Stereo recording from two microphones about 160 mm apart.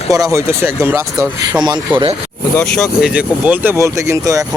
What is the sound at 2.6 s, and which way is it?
Speech, 5° left (ahead or behind).